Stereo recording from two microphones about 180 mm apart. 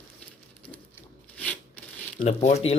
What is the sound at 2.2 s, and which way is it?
Speech, 40° left (ahead or behind).